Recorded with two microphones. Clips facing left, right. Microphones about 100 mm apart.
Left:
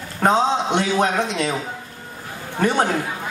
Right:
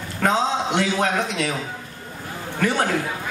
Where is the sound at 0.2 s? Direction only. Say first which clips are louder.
Left 3 dB; 20° left (ahead or behind).